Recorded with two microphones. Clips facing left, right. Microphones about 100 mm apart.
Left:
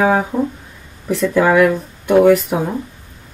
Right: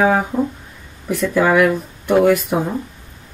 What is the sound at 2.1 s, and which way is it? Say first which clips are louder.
Speech: left 3 dB; 25° left (ahead or behind).